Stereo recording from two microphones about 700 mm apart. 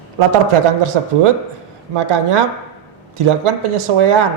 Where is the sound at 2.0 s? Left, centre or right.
Right.